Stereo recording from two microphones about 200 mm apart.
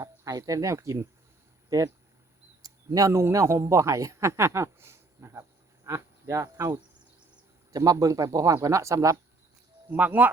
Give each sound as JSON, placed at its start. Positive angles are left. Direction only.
{"t": 0.0, "sound": "speech", "side_deg": -20}